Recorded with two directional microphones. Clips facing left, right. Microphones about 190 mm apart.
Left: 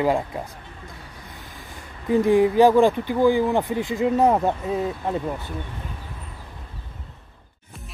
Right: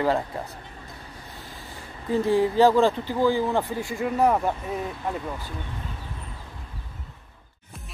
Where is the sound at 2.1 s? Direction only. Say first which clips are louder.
Left 4 dB; 15° left (ahead or behind).